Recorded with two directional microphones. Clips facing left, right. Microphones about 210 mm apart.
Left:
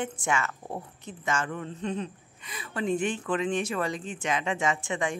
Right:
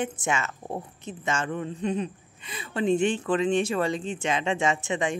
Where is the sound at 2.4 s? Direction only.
25° right (ahead or behind).